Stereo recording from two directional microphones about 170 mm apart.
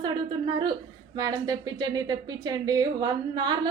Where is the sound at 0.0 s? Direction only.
25° right (ahead or behind).